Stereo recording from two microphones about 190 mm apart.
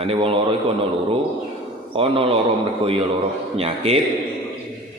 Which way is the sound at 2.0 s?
30° right (ahead or behind).